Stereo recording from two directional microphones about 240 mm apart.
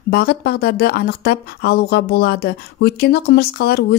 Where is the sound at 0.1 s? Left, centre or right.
Left.